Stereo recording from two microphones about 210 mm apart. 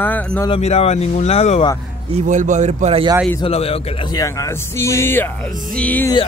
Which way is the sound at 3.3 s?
25° left (ahead or behind).